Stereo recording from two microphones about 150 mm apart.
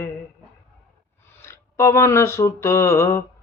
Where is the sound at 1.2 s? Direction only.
15° left (ahead or behind).